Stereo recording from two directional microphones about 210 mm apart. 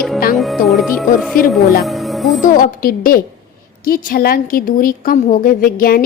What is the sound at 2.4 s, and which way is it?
A woman's voice, 40° left (ahead or behind).